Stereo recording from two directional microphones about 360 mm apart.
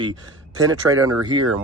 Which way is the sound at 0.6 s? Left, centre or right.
Centre.